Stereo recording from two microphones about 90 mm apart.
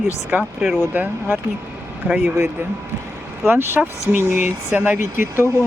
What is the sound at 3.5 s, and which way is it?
Speech, 25° right (ahead or behind).